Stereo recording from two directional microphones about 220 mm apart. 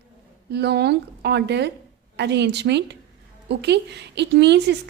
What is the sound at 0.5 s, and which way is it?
A woman's voice, 50° right (ahead or behind).